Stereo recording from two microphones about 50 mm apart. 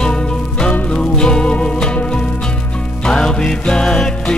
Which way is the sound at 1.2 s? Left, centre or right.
Centre.